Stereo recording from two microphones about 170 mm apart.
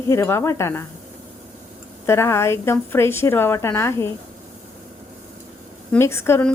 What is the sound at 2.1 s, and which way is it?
A woman's voice, 15° left (ahead or behind).